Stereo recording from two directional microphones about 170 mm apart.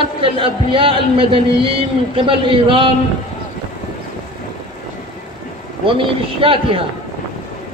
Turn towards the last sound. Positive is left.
turn(degrees=-30)  # may be behind; listen again after turning